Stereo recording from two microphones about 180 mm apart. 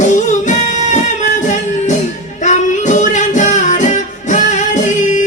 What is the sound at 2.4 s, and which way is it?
Music, 40° left (ahead or behind).